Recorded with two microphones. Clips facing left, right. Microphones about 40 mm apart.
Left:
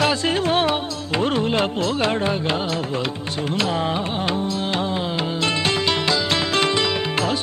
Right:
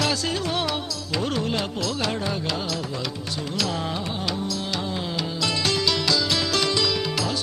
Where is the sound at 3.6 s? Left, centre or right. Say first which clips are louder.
Left 5 dB; left.